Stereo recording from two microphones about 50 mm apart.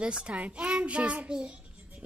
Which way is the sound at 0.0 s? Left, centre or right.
Right.